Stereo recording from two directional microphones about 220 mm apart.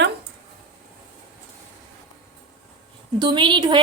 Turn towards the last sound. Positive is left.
turn(degrees=-20)  # may be behind; listen again after turning